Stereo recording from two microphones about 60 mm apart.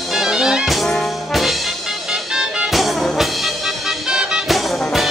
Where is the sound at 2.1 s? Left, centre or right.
Centre.